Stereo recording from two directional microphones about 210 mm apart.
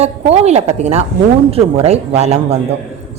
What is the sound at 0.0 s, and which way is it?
Speech, 30° right (ahead or behind).